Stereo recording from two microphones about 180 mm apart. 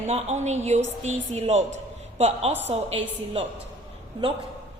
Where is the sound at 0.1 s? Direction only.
35° right (ahead or behind).